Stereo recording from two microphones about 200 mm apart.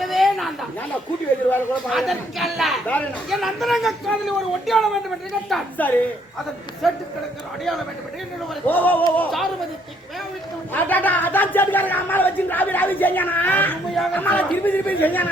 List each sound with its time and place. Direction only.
0.0 s a sound: centre (ahead or behind)
1.9 s a man's voice: centre (ahead or behind)
8.6 s speech: 10° left (ahead or behind)
10.8 s speech: 10° left (ahead or behind)